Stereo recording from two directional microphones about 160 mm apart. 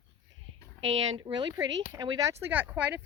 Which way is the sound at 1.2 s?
30° right (ahead or behind).